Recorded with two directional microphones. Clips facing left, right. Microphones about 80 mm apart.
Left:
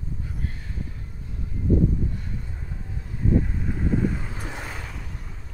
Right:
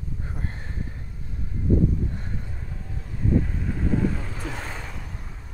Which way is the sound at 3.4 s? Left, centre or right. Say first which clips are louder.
Even; centre.